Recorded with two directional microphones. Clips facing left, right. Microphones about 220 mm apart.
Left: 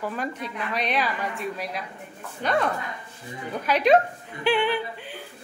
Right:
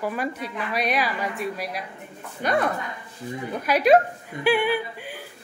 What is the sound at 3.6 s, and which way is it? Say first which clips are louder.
Speech: right 2 dB; 10° right (ahead or behind).